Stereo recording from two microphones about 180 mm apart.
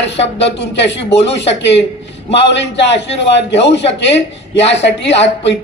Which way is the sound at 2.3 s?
75° left (ahead or behind).